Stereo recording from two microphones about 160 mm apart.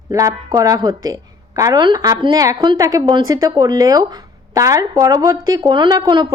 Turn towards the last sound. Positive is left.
turn(degrees=-30)  # may be behind; listen again after turning